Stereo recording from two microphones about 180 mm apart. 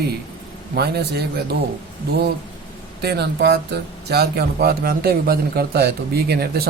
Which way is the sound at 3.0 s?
65° right (ahead or behind).